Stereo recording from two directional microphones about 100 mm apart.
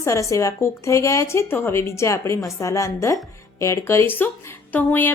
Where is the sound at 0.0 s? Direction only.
30° left (ahead or behind).